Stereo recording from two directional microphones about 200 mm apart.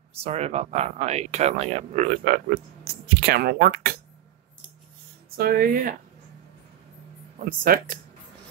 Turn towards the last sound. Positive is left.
turn(degrees=-45)  # may be behind; listen again after turning